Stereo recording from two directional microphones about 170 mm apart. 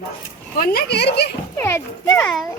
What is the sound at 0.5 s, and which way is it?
Speech, 65° left (ahead or behind).